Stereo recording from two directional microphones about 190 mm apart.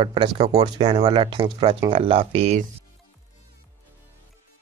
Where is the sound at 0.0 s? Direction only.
25° right (ahead or behind).